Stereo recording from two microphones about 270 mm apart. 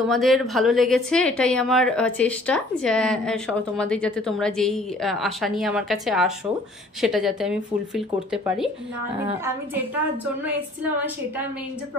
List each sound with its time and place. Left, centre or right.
0.1 s a woman's voice: centre
9.2 s a woman's voice: centre